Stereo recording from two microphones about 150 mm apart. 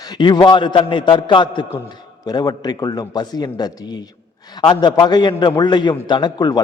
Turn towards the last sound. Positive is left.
turn(degrees=25)  # may be behind; listen again after turning